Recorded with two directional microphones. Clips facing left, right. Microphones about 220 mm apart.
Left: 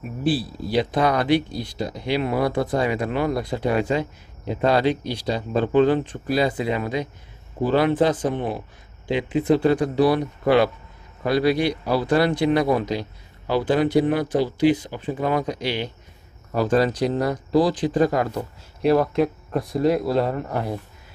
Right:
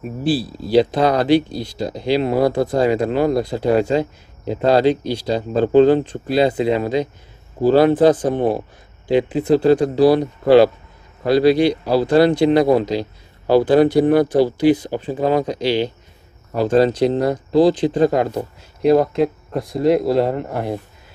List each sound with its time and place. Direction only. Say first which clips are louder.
0.2 s speech: right 3 dB; 30° right (ahead or behind)